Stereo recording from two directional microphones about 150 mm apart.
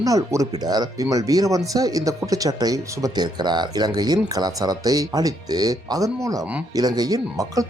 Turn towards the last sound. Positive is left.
turn(degrees=-25)  # may be behind; listen again after turning